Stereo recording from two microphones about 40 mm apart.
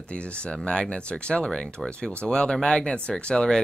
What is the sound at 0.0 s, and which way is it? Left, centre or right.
Speech, left.